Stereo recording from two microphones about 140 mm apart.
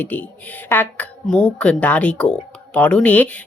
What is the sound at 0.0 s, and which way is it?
Speech, 10° left (ahead or behind).